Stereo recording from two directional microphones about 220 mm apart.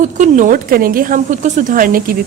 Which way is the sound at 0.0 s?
35° right (ahead or behind).